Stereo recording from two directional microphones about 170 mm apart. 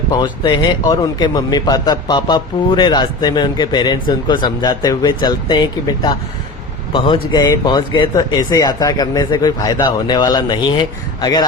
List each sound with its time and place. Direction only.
0.1 s speech: 25° left (ahead or behind)